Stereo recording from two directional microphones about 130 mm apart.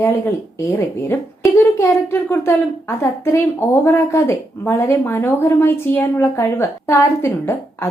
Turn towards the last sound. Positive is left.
turn(degrees=20)  # may be behind; listen again after turning